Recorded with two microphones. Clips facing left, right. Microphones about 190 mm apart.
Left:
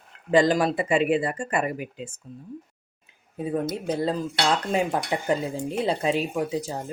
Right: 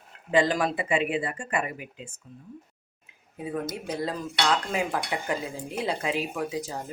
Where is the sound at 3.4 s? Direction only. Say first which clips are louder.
Left 5 dB; 30° left (ahead or behind).